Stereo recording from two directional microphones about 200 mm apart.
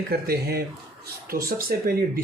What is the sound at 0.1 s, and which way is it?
Speech, 50° right (ahead or behind).